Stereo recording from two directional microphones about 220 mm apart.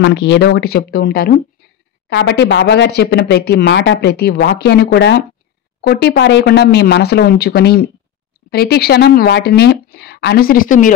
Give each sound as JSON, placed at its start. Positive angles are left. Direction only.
{"t": 0.0, "sound": "speech", "side_deg": 50}